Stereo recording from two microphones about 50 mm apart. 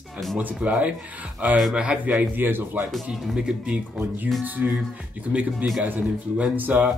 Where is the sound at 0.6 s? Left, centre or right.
Right.